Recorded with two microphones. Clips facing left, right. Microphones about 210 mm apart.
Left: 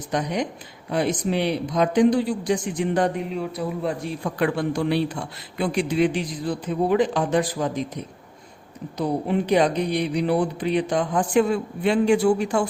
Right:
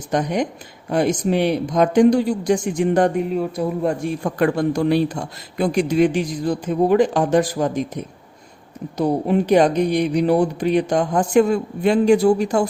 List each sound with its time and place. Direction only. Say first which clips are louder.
0.1 s speech: right 5 dB; 50° right (ahead or behind)
9.0 s speech: right 5 dB; 45° right (ahead or behind)